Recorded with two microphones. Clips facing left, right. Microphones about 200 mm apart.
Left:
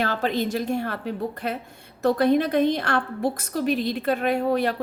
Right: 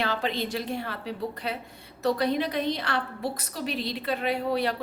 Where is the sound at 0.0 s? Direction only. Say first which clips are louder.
Left 4 dB; 45° left (ahead or behind).